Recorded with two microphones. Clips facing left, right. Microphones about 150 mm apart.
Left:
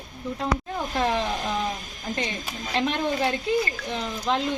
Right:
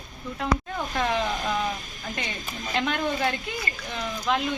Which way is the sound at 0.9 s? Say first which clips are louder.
Left 2 dB; 30° left (ahead or behind).